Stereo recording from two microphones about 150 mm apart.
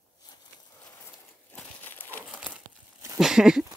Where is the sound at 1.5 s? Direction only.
10° left (ahead or behind).